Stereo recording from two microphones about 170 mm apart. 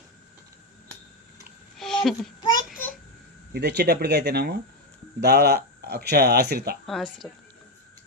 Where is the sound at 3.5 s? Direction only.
75° right (ahead or behind).